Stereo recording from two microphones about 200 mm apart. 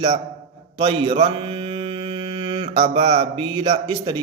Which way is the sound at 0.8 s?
30° right (ahead or behind).